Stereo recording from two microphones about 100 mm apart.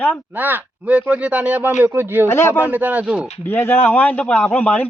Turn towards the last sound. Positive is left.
turn(degrees=15)  # may be behind; listen again after turning